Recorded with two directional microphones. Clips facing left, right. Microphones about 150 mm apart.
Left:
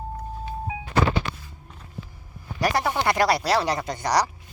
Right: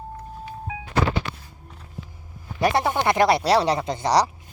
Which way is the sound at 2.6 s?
25° right (ahead or behind).